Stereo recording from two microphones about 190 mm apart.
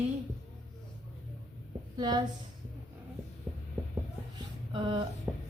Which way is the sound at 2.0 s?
20° right (ahead or behind).